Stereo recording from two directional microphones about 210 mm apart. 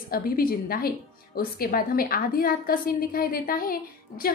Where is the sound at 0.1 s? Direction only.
45° left (ahead or behind).